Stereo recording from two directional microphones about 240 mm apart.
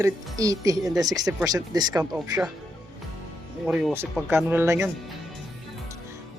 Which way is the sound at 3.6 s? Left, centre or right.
Centre.